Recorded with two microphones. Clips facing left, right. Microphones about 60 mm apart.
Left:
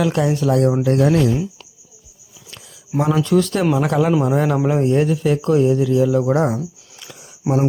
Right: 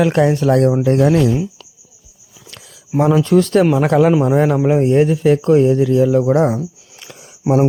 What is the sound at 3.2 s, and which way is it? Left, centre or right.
Speech, right.